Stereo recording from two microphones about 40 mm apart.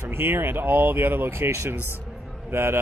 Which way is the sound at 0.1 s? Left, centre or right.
Right.